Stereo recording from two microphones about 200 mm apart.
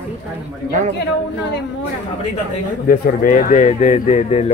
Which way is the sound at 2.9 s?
45° left (ahead or behind).